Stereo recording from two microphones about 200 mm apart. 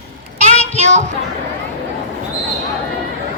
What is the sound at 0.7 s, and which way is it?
Child singing, 35° right (ahead or behind).